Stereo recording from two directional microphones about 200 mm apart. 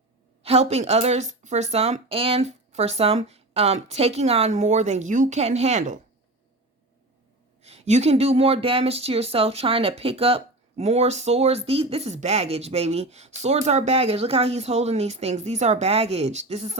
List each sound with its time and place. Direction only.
0.4 s speech: 30° right (ahead or behind)
7.6 s speech: 30° right (ahead or behind)